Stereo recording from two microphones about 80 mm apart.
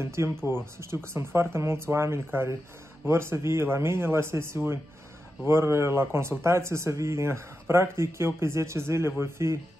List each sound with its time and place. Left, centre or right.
0.0 s speech: right